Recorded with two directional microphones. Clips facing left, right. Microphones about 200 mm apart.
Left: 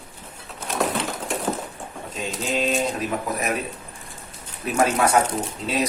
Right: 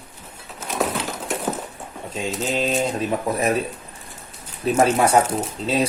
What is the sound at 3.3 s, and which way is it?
Speech, 30° right (ahead or behind).